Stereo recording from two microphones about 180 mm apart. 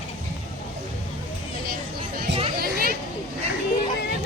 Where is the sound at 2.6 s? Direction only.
55° right (ahead or behind).